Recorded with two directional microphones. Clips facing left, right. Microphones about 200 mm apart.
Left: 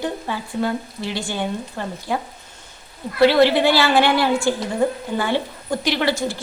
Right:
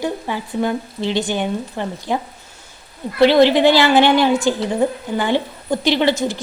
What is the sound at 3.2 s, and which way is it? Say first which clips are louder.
Speech: right 3 dB; 20° right (ahead or behind).